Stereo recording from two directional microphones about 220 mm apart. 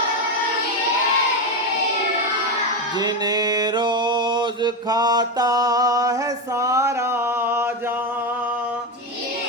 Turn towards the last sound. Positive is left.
turn(degrees=-10)  # may be behind; listen again after turning